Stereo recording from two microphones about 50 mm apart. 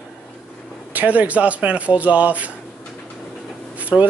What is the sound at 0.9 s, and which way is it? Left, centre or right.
Speech, right.